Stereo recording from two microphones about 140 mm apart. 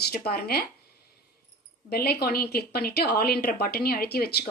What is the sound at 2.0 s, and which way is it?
Speech, 90° left.